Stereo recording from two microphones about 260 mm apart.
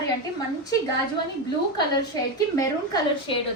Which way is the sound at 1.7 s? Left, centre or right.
Centre.